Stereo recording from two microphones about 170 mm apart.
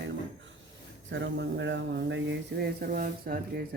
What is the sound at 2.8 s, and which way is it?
Speech, 60° right (ahead or behind).